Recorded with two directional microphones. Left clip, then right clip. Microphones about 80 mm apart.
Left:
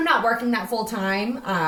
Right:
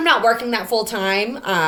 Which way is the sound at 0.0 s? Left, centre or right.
Right.